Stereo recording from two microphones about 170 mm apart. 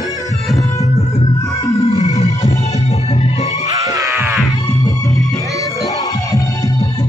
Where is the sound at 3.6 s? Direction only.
20° right (ahead or behind).